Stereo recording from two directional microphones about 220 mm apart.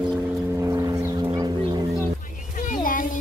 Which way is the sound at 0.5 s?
15° right (ahead or behind).